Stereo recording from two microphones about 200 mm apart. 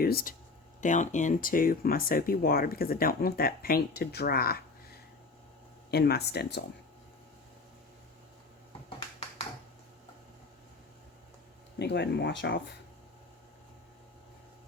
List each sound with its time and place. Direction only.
0.0 s speech: 50° left (ahead or behind)
0.8 s speech: 40° left (ahead or behind); by 6.6 s 55° left (ahead or behind)
11.8 s speech: 55° left (ahead or behind)